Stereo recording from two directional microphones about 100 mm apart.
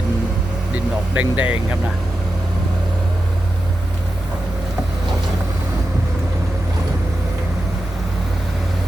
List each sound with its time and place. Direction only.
1.1 s speech: 15° right (ahead or behind)